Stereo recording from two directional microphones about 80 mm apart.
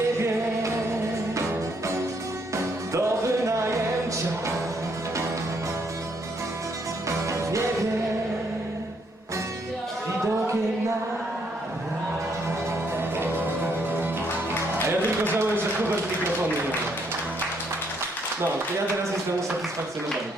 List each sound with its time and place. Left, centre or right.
2.9 s music: right
7.3 s music: right
14.8 s a sound: right